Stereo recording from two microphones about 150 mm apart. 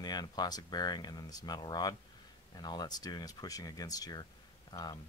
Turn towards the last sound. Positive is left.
turn(degrees=25)  # may be behind; listen again after turning